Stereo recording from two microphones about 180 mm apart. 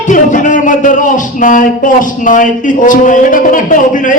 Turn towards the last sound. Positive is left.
turn(degrees=45)  # may be behind; listen again after turning